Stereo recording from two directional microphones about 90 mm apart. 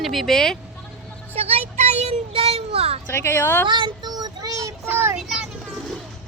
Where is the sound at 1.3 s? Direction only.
90° right.